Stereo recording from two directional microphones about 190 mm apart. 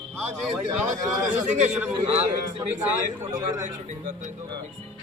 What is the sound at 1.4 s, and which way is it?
A man's voice, 40° right (ahead or behind).